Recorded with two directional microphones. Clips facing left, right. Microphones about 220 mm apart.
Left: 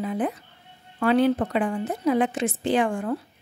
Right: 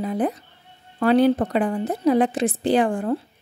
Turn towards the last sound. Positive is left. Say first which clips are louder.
# right 3 dB
turn(degrees=-35)  # may be behind; listen again after turning